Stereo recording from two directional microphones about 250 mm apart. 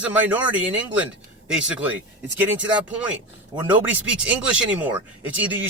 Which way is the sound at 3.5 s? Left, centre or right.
Centre.